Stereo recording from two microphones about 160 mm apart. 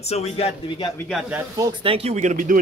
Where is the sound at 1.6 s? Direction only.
30° right (ahead or behind); by 2.6 s 55° right (ahead or behind).